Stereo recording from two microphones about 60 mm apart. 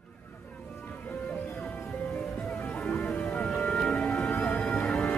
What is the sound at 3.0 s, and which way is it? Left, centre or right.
Music, left.